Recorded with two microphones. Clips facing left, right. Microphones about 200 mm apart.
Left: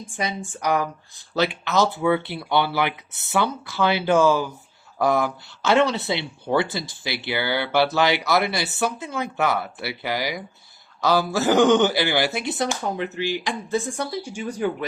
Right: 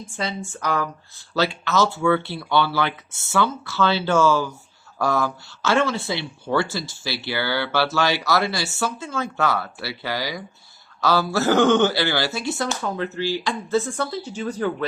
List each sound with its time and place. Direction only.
0.2 s speech: 15° left (ahead or behind)